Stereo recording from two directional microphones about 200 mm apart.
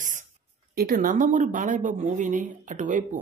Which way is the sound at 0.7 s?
45° right (ahead or behind).